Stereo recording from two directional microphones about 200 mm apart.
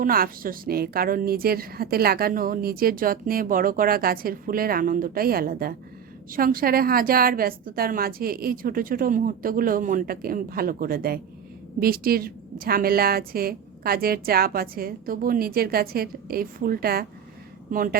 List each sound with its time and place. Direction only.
0.0 s a woman's voice: 45° right (ahead or behind)